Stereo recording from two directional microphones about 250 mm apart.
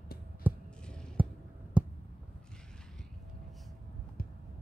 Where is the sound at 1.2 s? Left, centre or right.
Centre.